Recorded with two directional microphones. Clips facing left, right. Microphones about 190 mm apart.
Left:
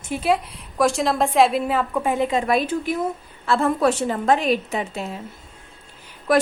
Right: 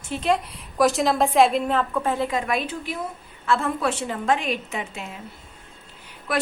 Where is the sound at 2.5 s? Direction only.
40° left (ahead or behind).